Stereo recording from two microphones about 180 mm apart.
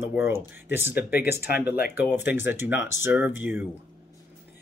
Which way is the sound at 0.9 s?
60° left (ahead or behind).